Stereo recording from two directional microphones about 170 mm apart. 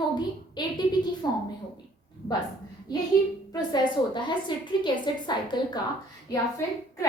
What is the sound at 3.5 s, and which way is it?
A woman's voice, 25° left (ahead or behind).